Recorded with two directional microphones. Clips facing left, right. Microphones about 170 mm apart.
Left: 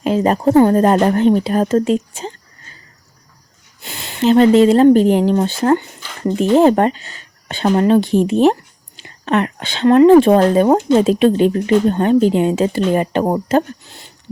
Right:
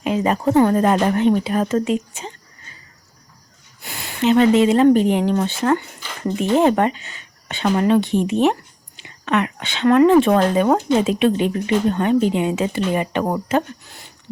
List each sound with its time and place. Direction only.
0.0 s speech: 35° left (ahead or behind)
3.8 s speech: 25° left (ahead or behind)
13.2 s speech: 25° left (ahead or behind)